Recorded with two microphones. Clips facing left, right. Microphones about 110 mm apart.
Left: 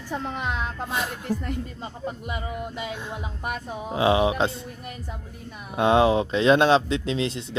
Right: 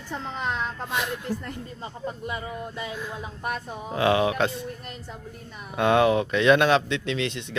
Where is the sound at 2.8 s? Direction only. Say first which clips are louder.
Left 1 dB; 25° left (ahead or behind).